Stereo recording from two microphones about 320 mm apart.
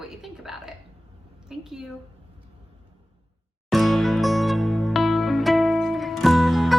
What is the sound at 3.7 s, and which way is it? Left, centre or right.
Music, centre.